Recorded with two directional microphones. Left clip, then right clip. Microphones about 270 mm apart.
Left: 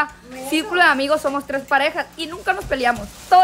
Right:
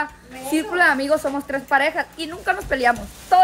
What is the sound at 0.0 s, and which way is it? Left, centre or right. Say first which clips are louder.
Speech: left 4 dB; centre.